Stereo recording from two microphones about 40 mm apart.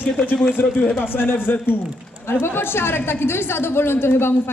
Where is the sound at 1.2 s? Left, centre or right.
Left.